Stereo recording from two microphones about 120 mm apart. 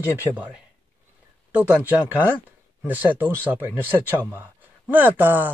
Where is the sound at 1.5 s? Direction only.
10° right (ahead or behind).